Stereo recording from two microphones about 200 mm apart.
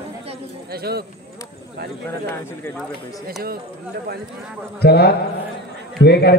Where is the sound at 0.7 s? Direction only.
50° right (ahead or behind).